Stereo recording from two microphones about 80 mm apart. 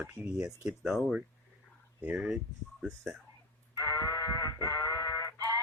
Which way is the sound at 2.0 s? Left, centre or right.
Centre.